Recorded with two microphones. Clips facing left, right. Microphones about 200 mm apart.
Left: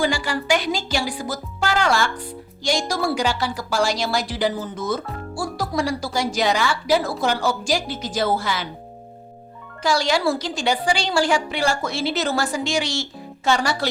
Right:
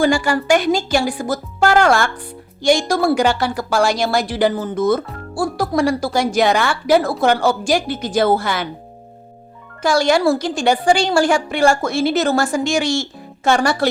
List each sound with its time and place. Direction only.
0.0 s a woman's voice: 50° right (ahead or behind)
9.8 s a woman's voice: 50° right (ahead or behind)